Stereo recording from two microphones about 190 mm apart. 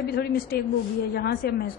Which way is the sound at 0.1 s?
55° left (ahead or behind).